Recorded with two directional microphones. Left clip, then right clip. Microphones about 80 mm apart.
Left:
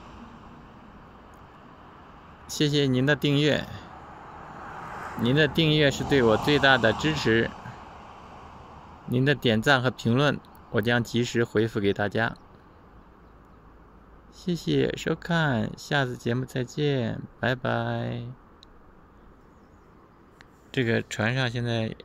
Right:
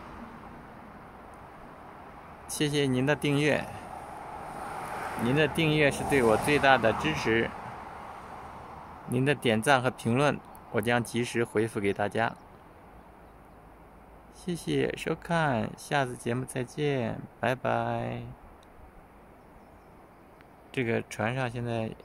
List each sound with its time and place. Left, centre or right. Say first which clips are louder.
0.0 s vehicle: right 2 dB; left
2.5 s speech: left 3 dB; left
3.6 s a sound: right 2 dB; right
3.9 s vehicle: right 3 dB; centre
5.2 s speech: left 4 dB; left
7.6 s vehicle: right 2 dB; left
9.1 s speech: left 3 dB; left
14.4 s speech: left 4 dB; left
20.7 s speech: left 4 dB; left